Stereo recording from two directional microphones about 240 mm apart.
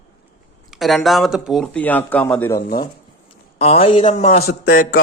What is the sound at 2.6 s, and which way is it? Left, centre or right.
Speech, left.